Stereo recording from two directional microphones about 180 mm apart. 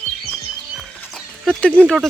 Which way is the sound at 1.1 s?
5° left (ahead or behind).